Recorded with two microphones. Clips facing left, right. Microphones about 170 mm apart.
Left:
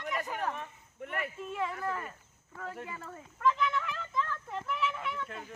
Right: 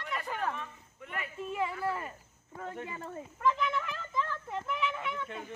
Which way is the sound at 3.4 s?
Centre (ahead or behind).